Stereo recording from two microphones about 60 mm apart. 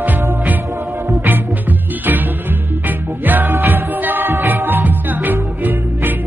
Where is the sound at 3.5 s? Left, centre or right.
Right.